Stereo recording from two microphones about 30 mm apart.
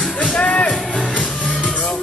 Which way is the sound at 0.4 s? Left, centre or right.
Left.